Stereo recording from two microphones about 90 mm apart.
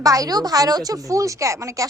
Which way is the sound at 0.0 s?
40° right (ahead or behind).